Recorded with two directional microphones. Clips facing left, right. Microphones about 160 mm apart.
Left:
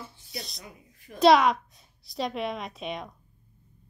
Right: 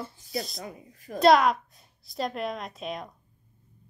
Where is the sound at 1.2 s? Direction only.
Centre (ahead or behind).